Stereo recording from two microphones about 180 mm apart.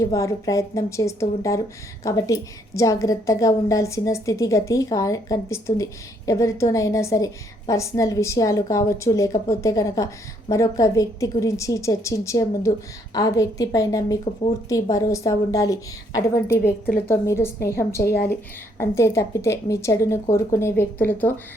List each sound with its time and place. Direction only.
0.0 s a woman's voice: 15° left (ahead or behind)